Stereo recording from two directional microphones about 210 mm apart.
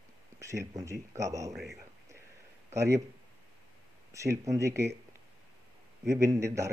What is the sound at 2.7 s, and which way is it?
Speech, 15° right (ahead or behind).